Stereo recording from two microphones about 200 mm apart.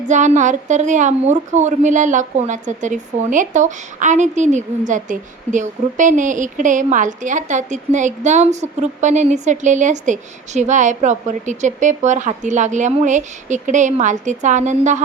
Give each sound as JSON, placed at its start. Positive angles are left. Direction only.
{"t": 0.1, "sound": "a woman's voice", "side_deg": -35}